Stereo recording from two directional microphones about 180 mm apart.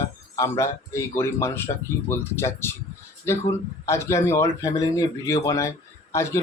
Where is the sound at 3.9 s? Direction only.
15° left (ahead or behind).